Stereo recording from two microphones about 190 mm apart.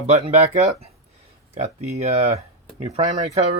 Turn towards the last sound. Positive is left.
turn(degrees=-35)  # may be behind; listen again after turning